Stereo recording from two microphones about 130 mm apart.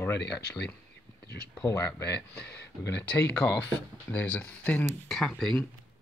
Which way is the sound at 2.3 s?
10° left (ahead or behind).